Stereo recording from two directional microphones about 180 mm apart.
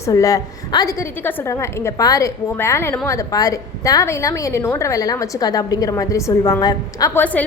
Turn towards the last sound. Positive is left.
turn(degrees=10)  # may be behind; listen again after turning